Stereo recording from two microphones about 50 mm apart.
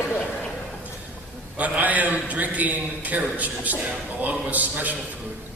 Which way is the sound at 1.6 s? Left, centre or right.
Right.